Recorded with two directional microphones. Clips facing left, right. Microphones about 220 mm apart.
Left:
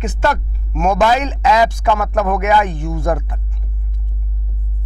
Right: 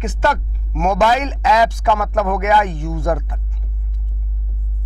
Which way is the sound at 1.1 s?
10° left (ahead or behind).